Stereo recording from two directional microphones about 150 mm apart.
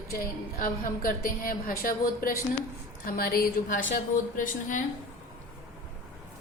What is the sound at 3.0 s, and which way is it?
A woman's voice, 80° left.